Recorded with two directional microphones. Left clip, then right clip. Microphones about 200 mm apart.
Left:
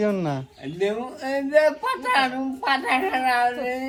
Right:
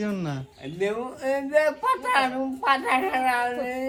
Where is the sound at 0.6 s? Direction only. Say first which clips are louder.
Even; 40° right (ahead or behind).